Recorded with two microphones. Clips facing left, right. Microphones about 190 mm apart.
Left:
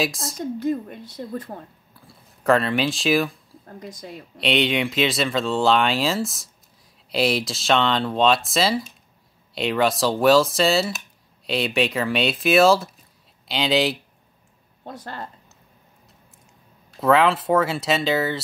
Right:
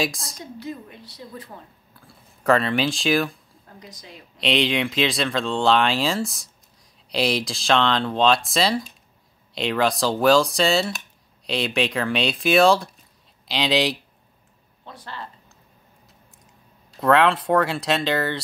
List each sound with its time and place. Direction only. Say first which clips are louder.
0.0 s speech: left 1 dB; centre (ahead or behind)
0.4 s speech: left 10 dB; 50° left (ahead or behind)
2.0 s speech: even; centre (ahead or behind)
3.6 s speech: left 7 dB; 50° left (ahead or behind)
4.1 s speech: even; centre (ahead or behind)
14.9 s speech: left 3 dB; 45° left (ahead or behind)
17.0 s speech: even; centre (ahead or behind)